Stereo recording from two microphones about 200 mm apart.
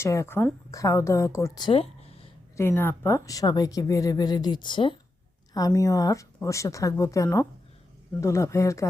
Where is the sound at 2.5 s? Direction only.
10° left (ahead or behind).